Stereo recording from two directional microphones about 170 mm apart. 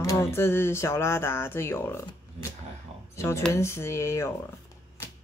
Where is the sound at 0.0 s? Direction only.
15° left (ahead or behind).